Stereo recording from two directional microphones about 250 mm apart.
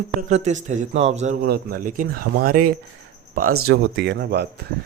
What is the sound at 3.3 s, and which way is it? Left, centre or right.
Speech, right.